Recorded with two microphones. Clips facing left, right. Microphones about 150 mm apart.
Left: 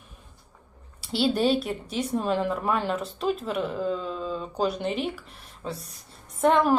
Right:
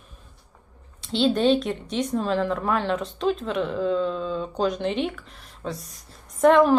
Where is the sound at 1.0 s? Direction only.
10° left (ahead or behind).